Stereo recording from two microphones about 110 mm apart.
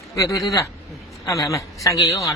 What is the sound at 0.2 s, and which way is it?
A man's voice, 30° left (ahead or behind).